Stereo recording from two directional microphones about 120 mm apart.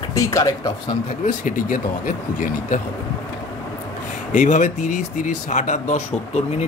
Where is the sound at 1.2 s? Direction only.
90° left.